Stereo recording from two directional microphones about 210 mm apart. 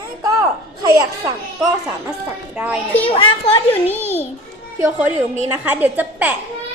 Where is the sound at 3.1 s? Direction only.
20° left (ahead or behind).